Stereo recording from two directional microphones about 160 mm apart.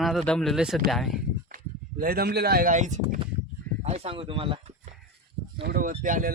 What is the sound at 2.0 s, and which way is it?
Speech, 75° right (ahead or behind).